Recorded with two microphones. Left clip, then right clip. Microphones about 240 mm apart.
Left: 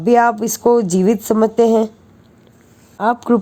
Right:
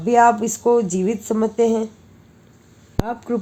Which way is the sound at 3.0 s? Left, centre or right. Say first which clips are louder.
Left 11 dB; left.